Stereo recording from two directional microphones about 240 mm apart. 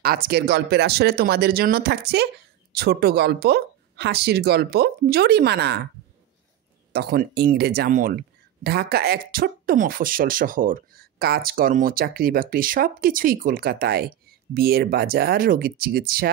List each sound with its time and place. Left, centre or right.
0.0 s speech: right
6.9 s speech: right